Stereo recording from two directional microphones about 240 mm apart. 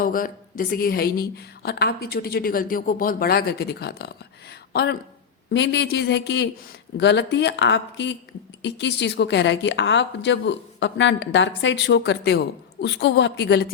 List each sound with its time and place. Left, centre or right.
0.0 s a woman's voice: left